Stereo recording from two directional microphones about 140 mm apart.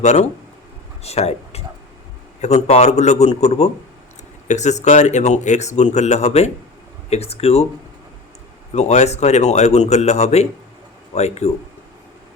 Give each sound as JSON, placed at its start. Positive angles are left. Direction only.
{"t": 0.0, "sound": "a man's voice", "side_deg": 55}
{"t": 8.7, "sound": "speech", "side_deg": 55}